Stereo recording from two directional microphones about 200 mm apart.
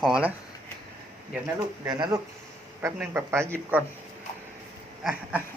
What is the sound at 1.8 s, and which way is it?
Speech, 20° right (ahead or behind).